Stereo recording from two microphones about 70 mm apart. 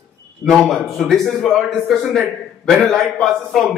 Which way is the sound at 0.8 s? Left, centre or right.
Centre.